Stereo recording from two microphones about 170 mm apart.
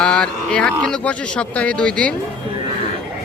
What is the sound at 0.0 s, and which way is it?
Speech, 5° left (ahead or behind).